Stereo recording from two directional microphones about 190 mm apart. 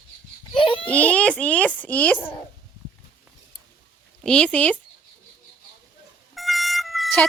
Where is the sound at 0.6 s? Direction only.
25° left (ahead or behind).